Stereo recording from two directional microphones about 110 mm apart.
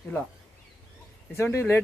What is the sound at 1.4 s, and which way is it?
Speech, 20° left (ahead or behind).